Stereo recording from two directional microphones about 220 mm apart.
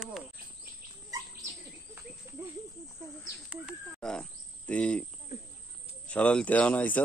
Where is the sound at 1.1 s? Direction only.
15° right (ahead or behind).